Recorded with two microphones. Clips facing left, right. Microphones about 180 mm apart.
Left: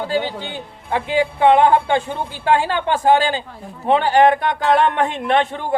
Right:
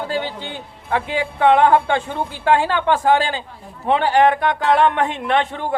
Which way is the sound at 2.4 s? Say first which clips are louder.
Even; 35° left (ahead or behind).